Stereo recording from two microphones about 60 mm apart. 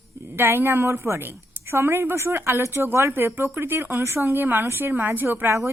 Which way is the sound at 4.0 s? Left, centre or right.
Right.